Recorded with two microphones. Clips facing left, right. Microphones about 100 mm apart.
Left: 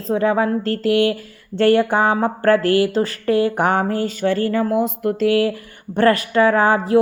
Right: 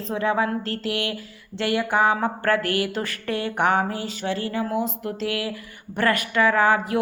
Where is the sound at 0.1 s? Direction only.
35° left (ahead or behind); by 5.3 s 50° left (ahead or behind).